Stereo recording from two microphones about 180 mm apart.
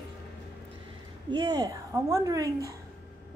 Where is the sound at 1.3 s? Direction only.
20° right (ahead or behind).